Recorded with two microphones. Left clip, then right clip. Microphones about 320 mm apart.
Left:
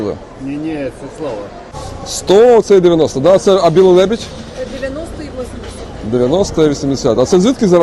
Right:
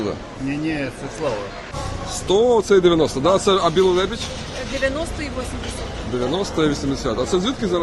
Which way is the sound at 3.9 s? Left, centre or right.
Left.